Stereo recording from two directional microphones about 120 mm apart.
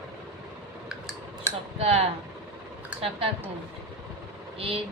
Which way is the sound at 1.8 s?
60° right (ahead or behind).